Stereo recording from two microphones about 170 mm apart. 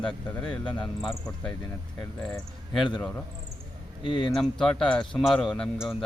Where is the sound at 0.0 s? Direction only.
5° left (ahead or behind).